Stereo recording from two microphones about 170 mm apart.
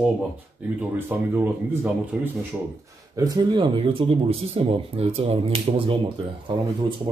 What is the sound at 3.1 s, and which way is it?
Speech, 20° right (ahead or behind).